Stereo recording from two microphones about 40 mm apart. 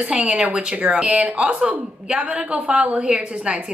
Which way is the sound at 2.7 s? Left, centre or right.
Right.